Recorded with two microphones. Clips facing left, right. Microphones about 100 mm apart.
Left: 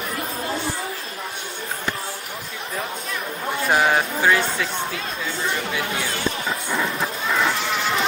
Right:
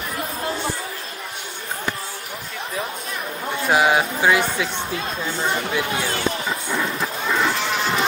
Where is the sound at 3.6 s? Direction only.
5° right (ahead or behind).